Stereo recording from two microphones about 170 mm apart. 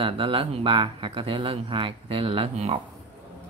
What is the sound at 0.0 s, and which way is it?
Speech, 35° right (ahead or behind).